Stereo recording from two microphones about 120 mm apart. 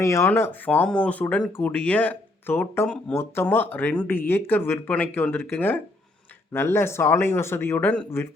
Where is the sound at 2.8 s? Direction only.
5° left (ahead or behind).